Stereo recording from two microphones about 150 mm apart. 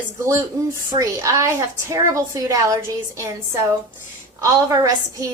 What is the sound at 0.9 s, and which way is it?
A woman's voice, 20° right (ahead or behind).